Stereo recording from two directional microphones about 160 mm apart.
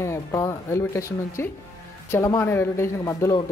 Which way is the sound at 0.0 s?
15° left (ahead or behind).